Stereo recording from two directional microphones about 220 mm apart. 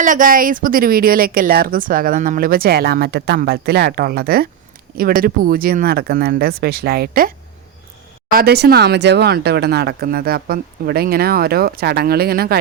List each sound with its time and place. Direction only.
0.0 s a woman's voice: 35° right (ahead or behind)